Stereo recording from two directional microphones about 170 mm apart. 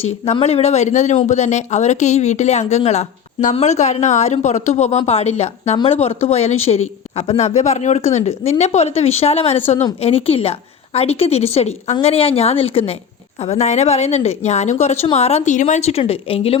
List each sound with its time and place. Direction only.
0.3 s speech: 40° left (ahead or behind)